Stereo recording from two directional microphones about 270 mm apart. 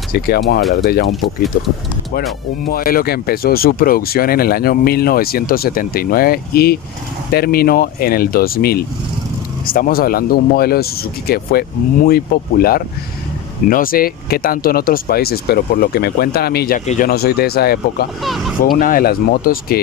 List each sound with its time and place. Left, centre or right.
0.1 s speech: left
2.7 s speech: left